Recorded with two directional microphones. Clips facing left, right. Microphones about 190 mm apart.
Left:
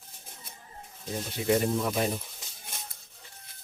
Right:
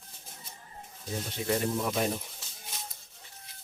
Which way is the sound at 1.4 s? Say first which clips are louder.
Left 4 dB; 15° left (ahead or behind).